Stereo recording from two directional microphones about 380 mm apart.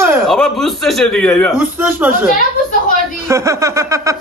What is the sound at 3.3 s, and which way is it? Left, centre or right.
Speech, centre.